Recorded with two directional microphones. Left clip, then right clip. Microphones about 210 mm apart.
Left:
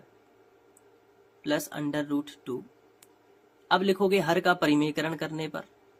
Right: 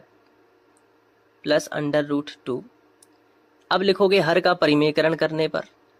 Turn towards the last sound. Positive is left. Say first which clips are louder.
# right 12 dB
turn(degrees=-15)  # may be behind; listen again after turning